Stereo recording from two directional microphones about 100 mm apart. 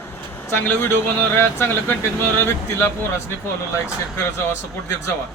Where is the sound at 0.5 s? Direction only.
20° left (ahead or behind).